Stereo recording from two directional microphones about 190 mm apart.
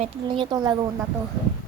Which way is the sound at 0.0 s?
25° right (ahead or behind).